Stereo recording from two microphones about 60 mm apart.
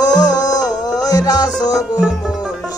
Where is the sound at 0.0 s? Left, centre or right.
Left.